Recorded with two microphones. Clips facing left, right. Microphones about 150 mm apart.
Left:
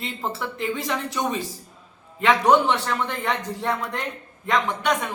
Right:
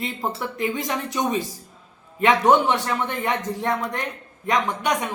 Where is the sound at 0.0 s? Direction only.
15° right (ahead or behind).